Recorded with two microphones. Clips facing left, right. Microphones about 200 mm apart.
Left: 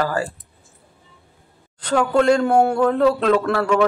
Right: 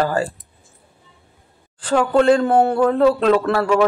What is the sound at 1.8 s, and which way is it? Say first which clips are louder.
A man's voice: right 2 dB; 5° right (ahead or behind).